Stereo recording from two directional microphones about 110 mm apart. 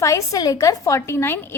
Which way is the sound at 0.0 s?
30° left (ahead or behind).